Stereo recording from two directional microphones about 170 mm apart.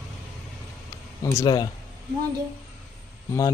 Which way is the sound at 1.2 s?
20° left (ahead or behind).